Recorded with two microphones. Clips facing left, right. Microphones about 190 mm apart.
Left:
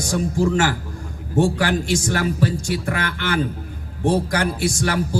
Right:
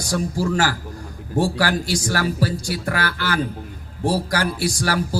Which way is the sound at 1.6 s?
40° right (ahead or behind).